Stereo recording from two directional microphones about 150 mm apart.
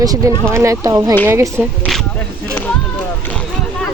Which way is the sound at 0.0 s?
25° right (ahead or behind).